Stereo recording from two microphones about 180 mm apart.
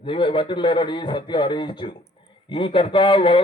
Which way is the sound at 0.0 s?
30° left (ahead or behind).